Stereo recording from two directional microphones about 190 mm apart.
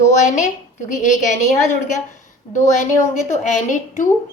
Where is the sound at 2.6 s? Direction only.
40° left (ahead or behind).